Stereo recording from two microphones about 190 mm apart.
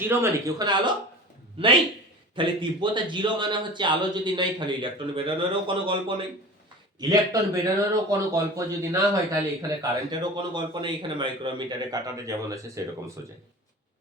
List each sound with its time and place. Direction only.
0.0 s speech: 10° right (ahead or behind)
2.3 s a man's voice: 25° right (ahead or behind)